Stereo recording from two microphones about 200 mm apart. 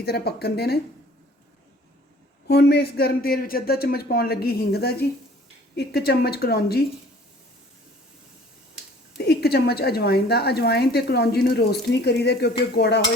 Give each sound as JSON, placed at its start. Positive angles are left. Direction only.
{"t": 0.0, "sound": "a woman's voice", "side_deg": 55}
{"t": 2.5, "sound": "a woman's voice", "side_deg": 55}
{"t": 9.1, "sound": "a woman's voice", "side_deg": 55}